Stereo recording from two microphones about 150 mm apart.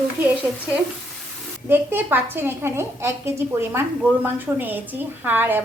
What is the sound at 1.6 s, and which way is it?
A woman's voice, 15° right (ahead or behind).